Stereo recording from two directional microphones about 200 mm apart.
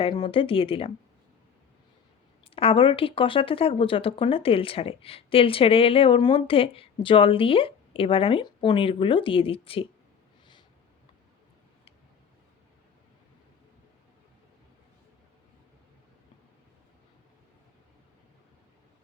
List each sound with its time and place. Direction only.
0.0 s speech: 25° left (ahead or behind)
2.6 s speech: 25° left (ahead or behind)